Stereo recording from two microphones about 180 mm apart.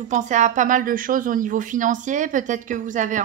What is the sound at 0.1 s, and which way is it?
Speech, 45° right (ahead or behind).